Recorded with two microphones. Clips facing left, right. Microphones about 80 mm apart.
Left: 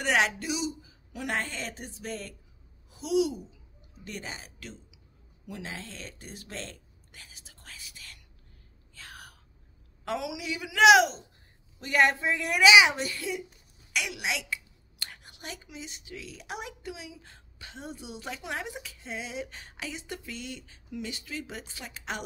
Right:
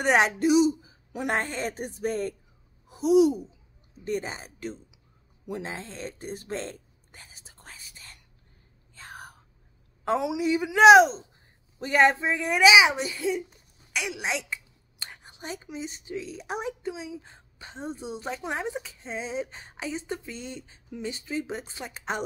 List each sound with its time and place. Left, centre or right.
0.0 s speech: right
7.1 s whispering: right
8.9 s gasp: right
10.0 s a woman's voice: right
12.6 s a child's voice: centre
14.1 s a woman's voice: right